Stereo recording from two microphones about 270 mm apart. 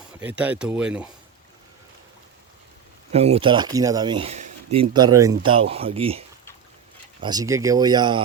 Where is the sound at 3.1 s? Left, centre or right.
Right.